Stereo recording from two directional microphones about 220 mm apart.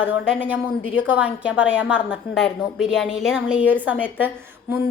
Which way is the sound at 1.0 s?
5° right (ahead or behind).